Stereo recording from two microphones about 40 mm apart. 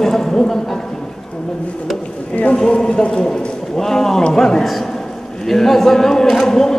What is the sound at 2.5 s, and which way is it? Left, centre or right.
A man's voice, centre.